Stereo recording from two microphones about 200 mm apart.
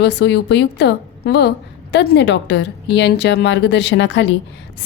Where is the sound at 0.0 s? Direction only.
60° left (ahead or behind).